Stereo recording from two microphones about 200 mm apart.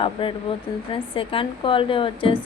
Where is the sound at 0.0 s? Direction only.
25° left (ahead or behind).